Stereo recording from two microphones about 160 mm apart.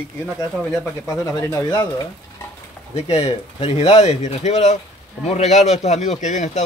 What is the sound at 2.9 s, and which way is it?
A man's voice, 40° left (ahead or behind).